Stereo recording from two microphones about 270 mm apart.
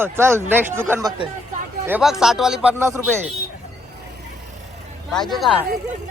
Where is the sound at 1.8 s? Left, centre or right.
Centre.